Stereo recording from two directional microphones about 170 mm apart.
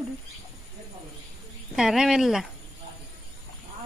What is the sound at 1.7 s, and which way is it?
Speech, 5° right (ahead or behind).